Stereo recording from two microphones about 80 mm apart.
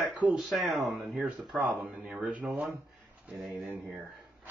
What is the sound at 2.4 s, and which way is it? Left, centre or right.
Speech, centre.